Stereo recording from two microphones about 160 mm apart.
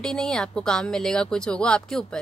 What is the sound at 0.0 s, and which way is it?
Speech, 5° left (ahead or behind).